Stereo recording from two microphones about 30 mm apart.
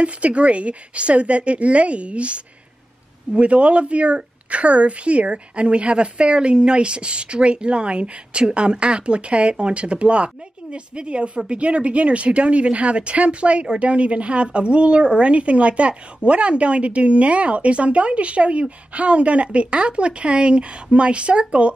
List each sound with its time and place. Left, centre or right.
0.0 s a woman's voice: right